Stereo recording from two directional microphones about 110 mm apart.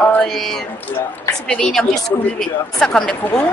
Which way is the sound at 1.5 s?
5° left (ahead or behind).